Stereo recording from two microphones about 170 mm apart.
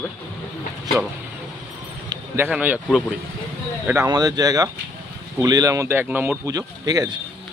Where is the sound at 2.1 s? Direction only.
10° right (ahead or behind).